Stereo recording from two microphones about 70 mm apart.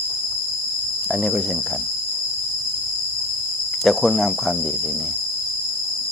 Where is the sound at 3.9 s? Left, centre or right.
Centre.